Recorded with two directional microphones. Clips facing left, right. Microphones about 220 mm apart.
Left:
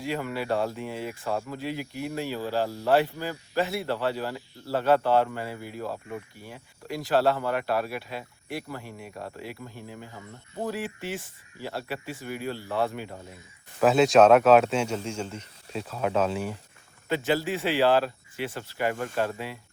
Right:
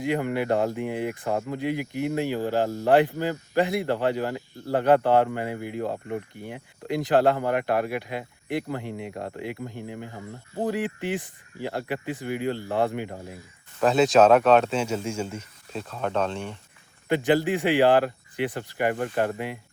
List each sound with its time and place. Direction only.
0.0 s speech: 20° right (ahead or behind)
3.1 s speech: 55° right (ahead or behind)
3.6 s speech: 15° right (ahead or behind)
9.8 s speech: 60° right (ahead or behind)
10.7 s speech: 15° right (ahead or behind)
13.8 s speech: centre (ahead or behind)
17.1 s speech: 15° right (ahead or behind)